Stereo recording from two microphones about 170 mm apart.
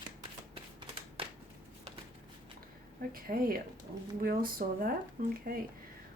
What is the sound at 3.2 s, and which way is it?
Speech, 60° right (ahead or behind).